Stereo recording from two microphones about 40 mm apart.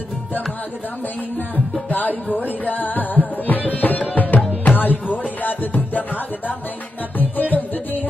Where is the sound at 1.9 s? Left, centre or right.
Left.